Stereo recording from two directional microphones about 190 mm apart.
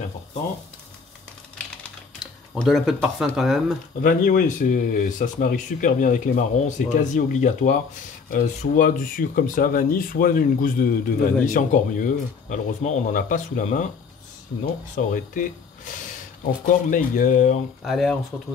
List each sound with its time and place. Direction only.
2.5 s speech: centre (ahead or behind)
4.0 s speech: 45° left (ahead or behind)
15.0 s speech: 45° left (ahead or behind)
17.8 s speech: centre (ahead or behind)